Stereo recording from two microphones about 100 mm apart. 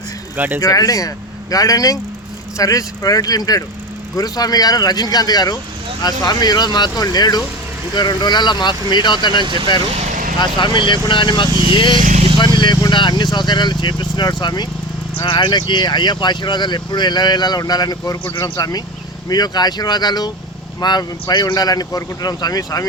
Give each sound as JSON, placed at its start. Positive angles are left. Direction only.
{"t": 0.3, "sound": "speech", "side_deg": -20}
{"t": 0.6, "sound": "speech", "side_deg": 35}